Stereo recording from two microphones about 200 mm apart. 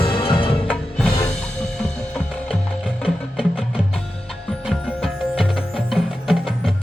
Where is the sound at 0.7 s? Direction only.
5° left (ahead or behind).